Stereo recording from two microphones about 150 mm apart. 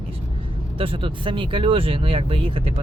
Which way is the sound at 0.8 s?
35° right (ahead or behind).